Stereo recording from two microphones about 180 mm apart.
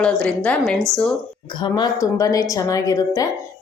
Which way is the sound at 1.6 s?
25° left (ahead or behind).